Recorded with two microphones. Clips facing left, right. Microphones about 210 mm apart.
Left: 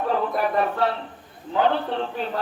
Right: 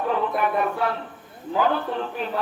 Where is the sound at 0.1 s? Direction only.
35° left (ahead or behind).